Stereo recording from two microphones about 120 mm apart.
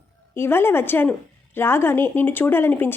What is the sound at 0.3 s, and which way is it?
A woman's voice, 20° left (ahead or behind).